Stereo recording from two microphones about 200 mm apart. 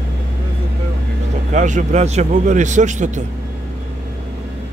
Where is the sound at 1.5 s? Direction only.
40° right (ahead or behind).